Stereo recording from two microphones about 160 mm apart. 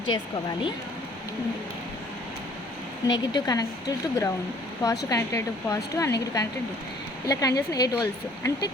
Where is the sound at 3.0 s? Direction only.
25° left (ahead or behind).